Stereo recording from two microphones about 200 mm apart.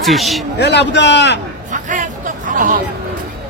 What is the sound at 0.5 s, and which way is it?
Speech, 60° left (ahead or behind).